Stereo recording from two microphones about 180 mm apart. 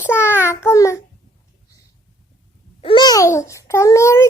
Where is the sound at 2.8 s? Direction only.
30° left (ahead or behind).